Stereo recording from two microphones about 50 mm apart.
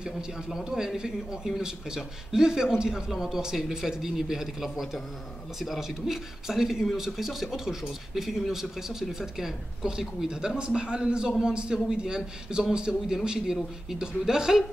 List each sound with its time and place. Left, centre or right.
0.0 s a man's voice: centre